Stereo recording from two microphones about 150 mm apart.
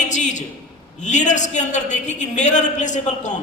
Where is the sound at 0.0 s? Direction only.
55° left (ahead or behind).